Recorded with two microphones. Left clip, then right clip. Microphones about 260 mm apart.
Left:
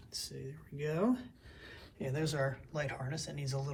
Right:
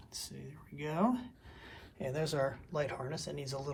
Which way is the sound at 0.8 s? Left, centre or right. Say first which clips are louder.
Even; right.